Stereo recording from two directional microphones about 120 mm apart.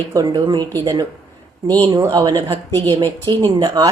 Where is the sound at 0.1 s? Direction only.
35° right (ahead or behind).